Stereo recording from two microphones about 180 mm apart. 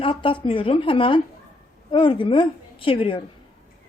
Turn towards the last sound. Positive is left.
turn(degrees=30)  # may be behind; listen again after turning